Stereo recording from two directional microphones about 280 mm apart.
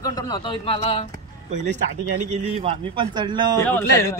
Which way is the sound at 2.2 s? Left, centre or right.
Right.